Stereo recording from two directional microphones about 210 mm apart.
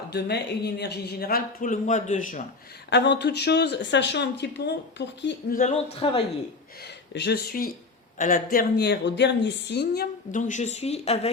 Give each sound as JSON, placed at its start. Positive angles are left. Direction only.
{"t": 0.1, "sound": "a woman's voice", "side_deg": 50}
{"t": 2.9, "sound": "speech", "side_deg": 55}
{"t": 5.5, "sound": "a man's voice", "side_deg": 30}
{"t": 6.8, "sound": "a woman's voice", "side_deg": 55}